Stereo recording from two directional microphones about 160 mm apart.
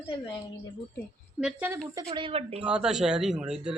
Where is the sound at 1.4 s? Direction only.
5° right (ahead or behind).